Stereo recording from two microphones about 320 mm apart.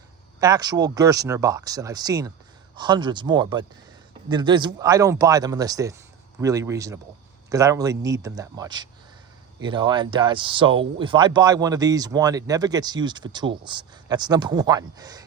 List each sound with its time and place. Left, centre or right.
0.3 s speech: centre